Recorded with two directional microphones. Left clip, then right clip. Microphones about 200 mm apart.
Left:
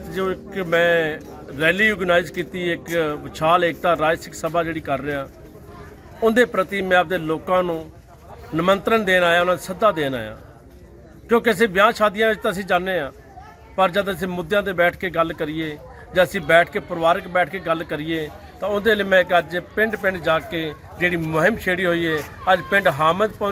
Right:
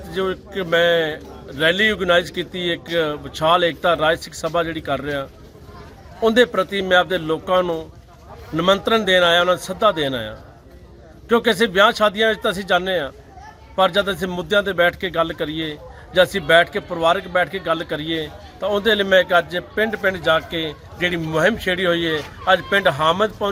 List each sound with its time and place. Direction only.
0.1 s speech: 5° right (ahead or behind)